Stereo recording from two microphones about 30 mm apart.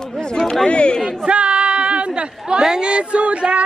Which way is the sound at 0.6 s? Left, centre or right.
Left.